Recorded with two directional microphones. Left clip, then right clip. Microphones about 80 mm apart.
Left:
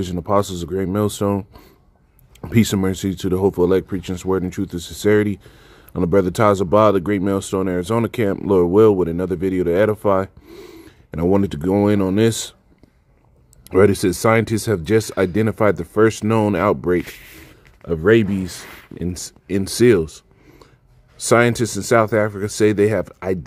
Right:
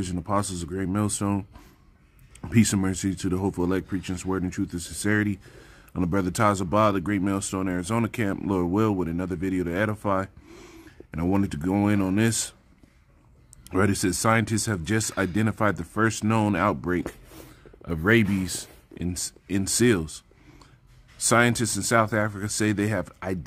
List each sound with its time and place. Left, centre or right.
0.3 s speech: left
2.5 s speech: left
10.5 s a sound: left
11.3 s speech: left
13.7 s speech: left
17.8 s speech: centre
19.1 s speech: left